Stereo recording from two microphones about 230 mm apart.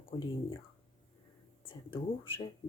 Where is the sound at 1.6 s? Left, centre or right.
Left.